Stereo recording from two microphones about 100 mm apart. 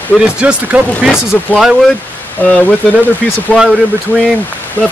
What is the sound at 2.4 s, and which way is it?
Speech, 15° left (ahead or behind).